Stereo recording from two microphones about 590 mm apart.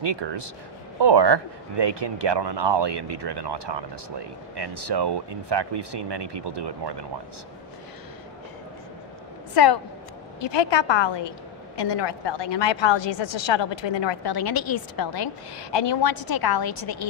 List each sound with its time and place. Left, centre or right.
0.0 s speech: right
9.6 s a woman's voice: left